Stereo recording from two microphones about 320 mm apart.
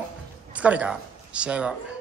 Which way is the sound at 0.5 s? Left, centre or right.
Centre.